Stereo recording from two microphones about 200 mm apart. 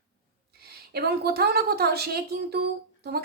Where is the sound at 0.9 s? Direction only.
50° right (ahead or behind).